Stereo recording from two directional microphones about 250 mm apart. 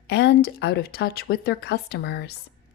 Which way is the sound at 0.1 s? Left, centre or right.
Left.